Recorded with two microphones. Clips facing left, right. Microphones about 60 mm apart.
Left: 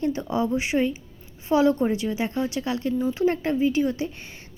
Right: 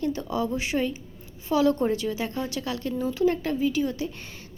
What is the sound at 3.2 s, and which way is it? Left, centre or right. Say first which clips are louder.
Speech: left 1 dB; left.